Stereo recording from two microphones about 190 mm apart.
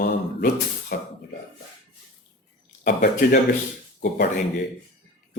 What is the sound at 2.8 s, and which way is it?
Speech, 55° left (ahead or behind).